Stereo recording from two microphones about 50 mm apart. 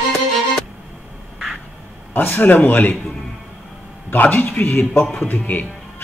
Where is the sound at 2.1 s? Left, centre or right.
Left.